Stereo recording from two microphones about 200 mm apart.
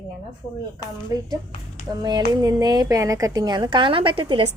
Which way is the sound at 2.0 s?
20° right (ahead or behind).